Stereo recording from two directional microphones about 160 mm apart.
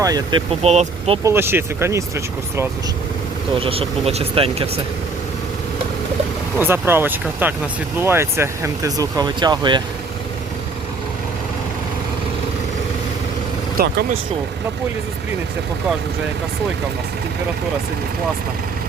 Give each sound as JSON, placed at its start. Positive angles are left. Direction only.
{"t": 0.0, "sound": "speech", "side_deg": -25}
{"t": 0.6, "sound": "speech", "side_deg": -40}
{"t": 1.2, "sound": "speech", "side_deg": -15}
{"t": 3.6, "sound": "speech", "side_deg": -35}
{"t": 6.6, "sound": "speech", "side_deg": -15}
{"t": 13.8, "sound": "speech", "side_deg": -70}